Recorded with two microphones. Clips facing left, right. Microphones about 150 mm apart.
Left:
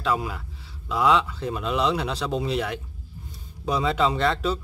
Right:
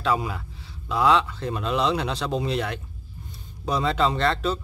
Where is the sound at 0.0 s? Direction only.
Centre (ahead or behind).